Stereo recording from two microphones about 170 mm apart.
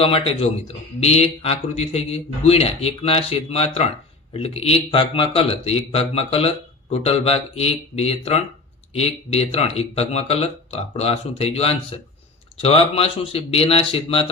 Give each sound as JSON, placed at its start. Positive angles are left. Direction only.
{"t": 0.0, "sound": "speech", "side_deg": 35}